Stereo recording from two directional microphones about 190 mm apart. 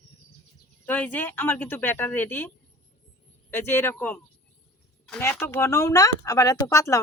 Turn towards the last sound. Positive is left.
turn(degrees=15)  # may be behind; listen again after turning